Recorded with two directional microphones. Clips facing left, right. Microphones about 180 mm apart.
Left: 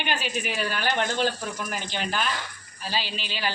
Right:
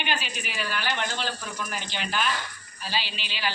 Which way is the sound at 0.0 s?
45° left (ahead or behind).